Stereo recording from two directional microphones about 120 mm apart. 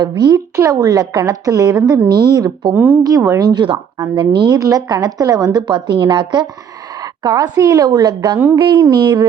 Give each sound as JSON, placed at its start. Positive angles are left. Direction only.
{"t": 0.0, "sound": "a woman's voice", "side_deg": -35}
{"t": 2.7, "sound": "speech", "side_deg": -15}
{"t": 3.0, "sound": "a woman's voice", "side_deg": -30}
{"t": 8.8, "sound": "speech", "side_deg": -30}